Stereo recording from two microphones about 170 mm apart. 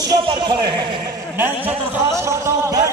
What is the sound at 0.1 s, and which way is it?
Speech, 25° right (ahead or behind).